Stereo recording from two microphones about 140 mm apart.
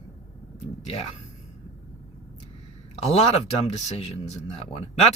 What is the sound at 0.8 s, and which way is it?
Speech, 45° left (ahead or behind).